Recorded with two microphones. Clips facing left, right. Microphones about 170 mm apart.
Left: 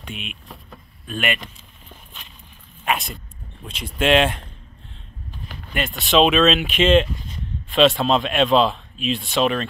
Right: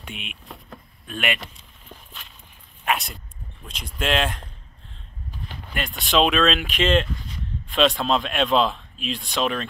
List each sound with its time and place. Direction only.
0.1 s speech: 75° right (ahead or behind)
1.2 s speech: 5° right (ahead or behind)
2.8 s a sound: centre (ahead or behind)
3.6 s speech: 5° left (ahead or behind)
5.7 s speech: centre (ahead or behind)